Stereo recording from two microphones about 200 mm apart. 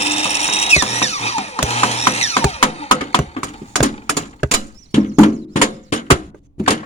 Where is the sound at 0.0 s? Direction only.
30° left (ahead or behind).